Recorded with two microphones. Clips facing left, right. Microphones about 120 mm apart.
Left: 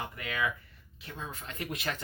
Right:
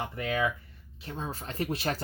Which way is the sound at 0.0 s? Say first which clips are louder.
Right 5 dB; 30° right (ahead or behind).